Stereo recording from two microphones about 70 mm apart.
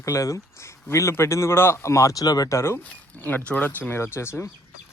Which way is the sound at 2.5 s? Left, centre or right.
Left.